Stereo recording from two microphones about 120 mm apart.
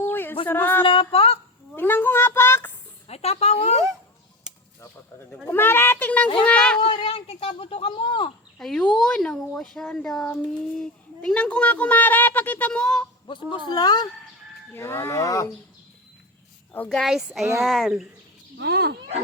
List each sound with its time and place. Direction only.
0.0 s a sound: 15° left (ahead or behind)
0.4 s speech: 15° left (ahead or behind)
0.9 s speech: 50° left (ahead or behind)
1.7 s a sound: 15° left (ahead or behind)
3.1 s speech: 60° left (ahead or behind)
5.5 s speech: 20° left (ahead or behind)
6.8 s speech: 50° left (ahead or behind)
8.5 s speech: 5° left (ahead or behind)
13.2 s a woman's voice: 40° left (ahead or behind)
14.8 s speech: 20° left (ahead or behind)
16.7 s speech: 10° left (ahead or behind)
17.0 s speech: 5° right (ahead or behind)